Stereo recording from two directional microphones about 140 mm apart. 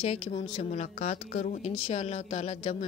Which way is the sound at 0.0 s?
45° left (ahead or behind).